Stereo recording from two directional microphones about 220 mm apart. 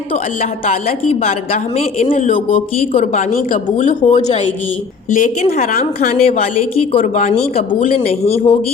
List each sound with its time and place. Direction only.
1.2 s a woman's voice: 25° left (ahead or behind)
7.7 s speech: 25° left (ahead or behind)